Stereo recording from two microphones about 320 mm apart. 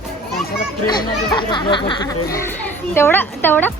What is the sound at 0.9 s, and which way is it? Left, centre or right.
Speech, centre.